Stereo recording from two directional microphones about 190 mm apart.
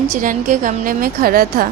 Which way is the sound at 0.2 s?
45° right (ahead or behind).